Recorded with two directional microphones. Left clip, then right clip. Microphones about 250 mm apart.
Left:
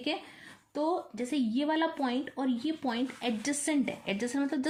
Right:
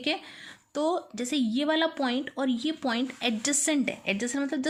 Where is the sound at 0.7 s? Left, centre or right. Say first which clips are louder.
Right 3 dB; right.